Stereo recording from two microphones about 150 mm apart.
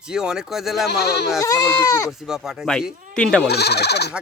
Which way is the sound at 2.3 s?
5° right (ahead or behind).